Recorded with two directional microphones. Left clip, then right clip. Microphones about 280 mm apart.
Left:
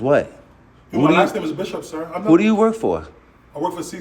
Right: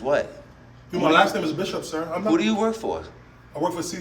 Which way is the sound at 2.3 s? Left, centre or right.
Centre.